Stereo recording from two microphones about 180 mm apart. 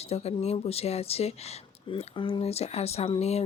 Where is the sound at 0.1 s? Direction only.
35° left (ahead or behind).